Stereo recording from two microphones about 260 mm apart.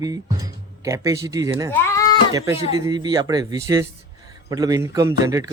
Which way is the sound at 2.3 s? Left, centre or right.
Centre.